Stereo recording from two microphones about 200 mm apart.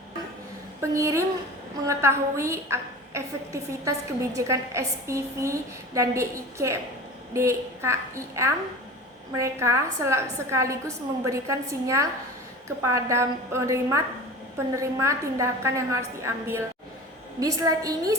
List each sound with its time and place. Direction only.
0.8 s a woman's voice: 15° right (ahead or behind)